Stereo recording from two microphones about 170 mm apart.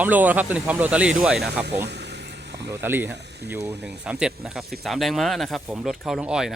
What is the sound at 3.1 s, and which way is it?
Speech, 85° right.